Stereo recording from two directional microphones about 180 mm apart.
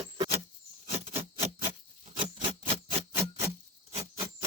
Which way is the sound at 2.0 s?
35° right (ahead or behind).